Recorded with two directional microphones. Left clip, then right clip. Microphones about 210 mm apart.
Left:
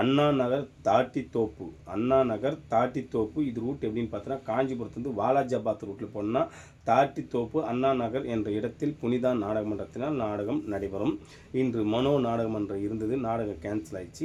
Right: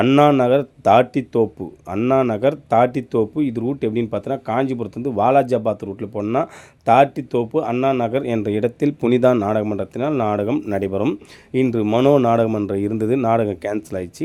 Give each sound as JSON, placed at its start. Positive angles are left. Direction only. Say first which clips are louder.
{"t": 0.0, "sound": "speech", "louder": "right 11 dB", "side_deg": -35}
{"t": 12.7, "sound": "speech", "louder": "right 11 dB", "side_deg": -45}